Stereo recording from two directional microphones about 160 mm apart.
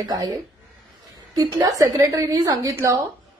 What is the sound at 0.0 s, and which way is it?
A woman's voice, 25° right (ahead or behind).